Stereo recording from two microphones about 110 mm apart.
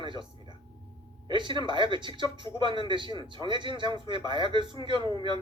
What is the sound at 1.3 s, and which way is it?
A man's voice, 45° right (ahead or behind).